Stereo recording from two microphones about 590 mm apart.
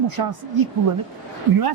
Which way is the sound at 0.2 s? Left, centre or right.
Right.